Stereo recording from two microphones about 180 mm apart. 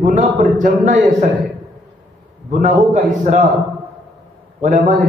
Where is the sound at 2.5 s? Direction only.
45° right (ahead or behind).